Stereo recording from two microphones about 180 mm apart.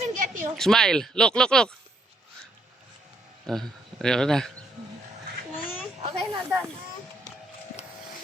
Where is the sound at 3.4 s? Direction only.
Centre (ahead or behind).